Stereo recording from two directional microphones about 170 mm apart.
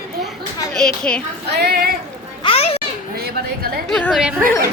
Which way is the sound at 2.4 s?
35° left (ahead or behind).